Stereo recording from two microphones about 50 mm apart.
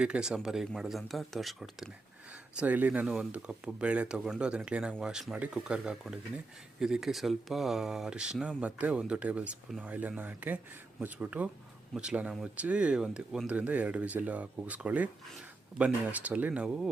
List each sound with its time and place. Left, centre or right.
0.0 s speech: centre
2.6 s speech: right
3.3 s speech: right
13.5 s speech: right
16.6 s speech: centre